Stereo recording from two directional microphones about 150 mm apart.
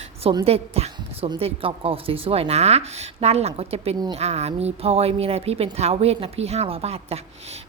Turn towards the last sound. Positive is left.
turn(degrees=-45)  # may be behind; listen again after turning